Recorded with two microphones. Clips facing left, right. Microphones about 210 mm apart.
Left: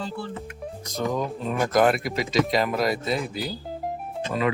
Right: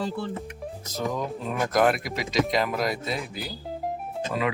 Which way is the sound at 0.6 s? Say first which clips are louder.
Left 3 dB; centre (ahead or behind).